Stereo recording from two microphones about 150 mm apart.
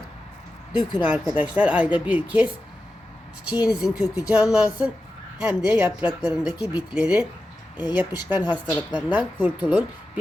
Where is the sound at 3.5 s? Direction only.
5° right (ahead or behind).